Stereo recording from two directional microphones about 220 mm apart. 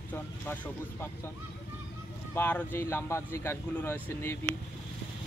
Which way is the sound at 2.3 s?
10° left (ahead or behind).